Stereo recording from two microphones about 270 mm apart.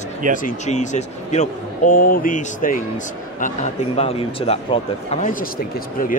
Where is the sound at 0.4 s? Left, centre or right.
Left.